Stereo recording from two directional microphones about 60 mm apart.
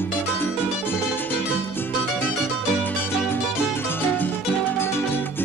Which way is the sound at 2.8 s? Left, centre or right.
Left.